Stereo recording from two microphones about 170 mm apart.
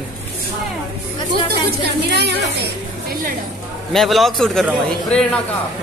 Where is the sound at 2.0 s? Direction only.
75° right (ahead or behind).